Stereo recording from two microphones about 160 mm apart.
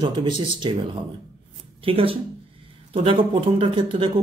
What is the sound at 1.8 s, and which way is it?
Speech, 35° right (ahead or behind).